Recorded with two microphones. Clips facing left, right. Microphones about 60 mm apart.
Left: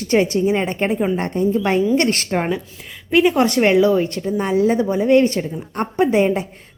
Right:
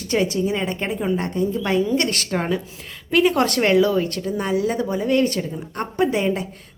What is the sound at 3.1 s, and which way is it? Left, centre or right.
A woman's voice, centre.